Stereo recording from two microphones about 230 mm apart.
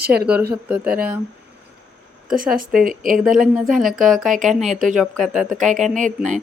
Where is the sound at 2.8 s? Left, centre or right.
Right.